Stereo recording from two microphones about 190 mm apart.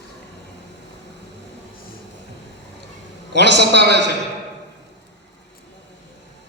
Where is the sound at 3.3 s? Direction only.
65° right (ahead or behind).